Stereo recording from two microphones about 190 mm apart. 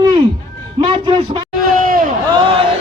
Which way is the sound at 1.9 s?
45° right (ahead or behind).